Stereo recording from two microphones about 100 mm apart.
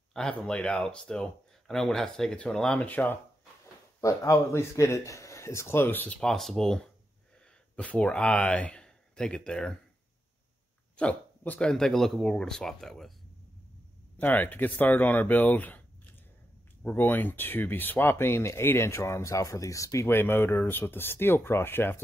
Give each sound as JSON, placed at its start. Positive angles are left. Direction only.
{"t": 0.1, "sound": "speech", "side_deg": 5}
{"t": 4.0, "sound": "speech", "side_deg": 35}
{"t": 6.1, "sound": "speech", "side_deg": 5}
{"t": 11.0, "sound": "speech", "side_deg": 15}
{"t": 14.1, "sound": "speech", "side_deg": 15}
{"t": 16.8, "sound": "speech", "side_deg": 20}